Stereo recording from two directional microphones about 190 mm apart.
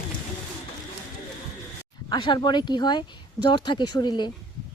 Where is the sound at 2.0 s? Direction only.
25° left (ahead or behind).